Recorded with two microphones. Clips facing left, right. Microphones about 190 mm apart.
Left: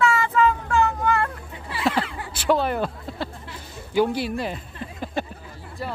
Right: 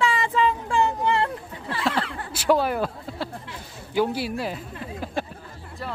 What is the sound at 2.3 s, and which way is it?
Speech, 5° right (ahead or behind).